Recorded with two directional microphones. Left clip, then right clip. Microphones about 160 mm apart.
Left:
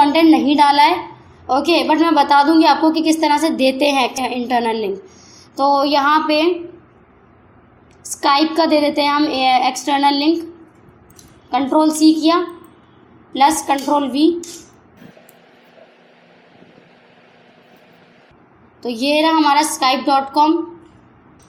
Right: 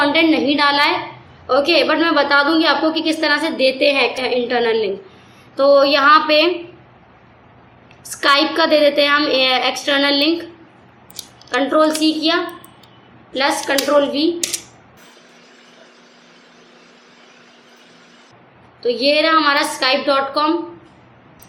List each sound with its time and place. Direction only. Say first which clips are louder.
0.0 s a woman's voice: left 3 dB; 40° left (ahead or behind)
5.5 s a woman's voice: right 2 dB; 35° left (ahead or behind)
8.1 s a woman's voice: even; 30° left (ahead or behind)
11.5 s a woman's voice: even; 35° left (ahead or behind)
18.8 s a woman's voice: right 1 dB; 45° left (ahead or behind)